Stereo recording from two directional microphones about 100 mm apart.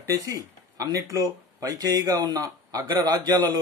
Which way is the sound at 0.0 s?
35° right (ahead or behind).